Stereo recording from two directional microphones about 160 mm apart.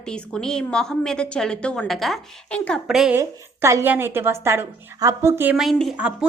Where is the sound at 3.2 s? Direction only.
15° right (ahead or behind).